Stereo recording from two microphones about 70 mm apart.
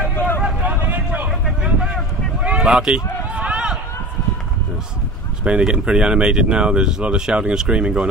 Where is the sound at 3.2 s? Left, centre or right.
Centre.